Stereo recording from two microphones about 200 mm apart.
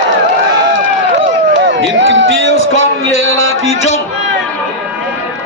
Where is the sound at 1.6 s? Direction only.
70° right (ahead or behind).